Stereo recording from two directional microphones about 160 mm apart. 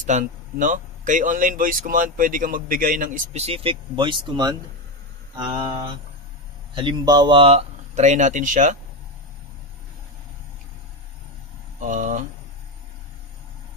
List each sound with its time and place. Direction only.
0.0 s speech: 50° right (ahead or behind); by 5.7 s 30° right (ahead or behind)
6.7 s speech: 30° right (ahead or behind); by 8.7 s 50° right (ahead or behind)
11.8 s speech: 55° right (ahead or behind)